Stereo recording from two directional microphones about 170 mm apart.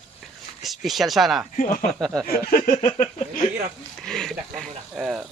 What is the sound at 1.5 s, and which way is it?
Speech, 50° left (ahead or behind).